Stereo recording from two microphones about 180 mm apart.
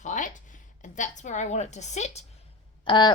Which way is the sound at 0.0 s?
45° left (ahead or behind).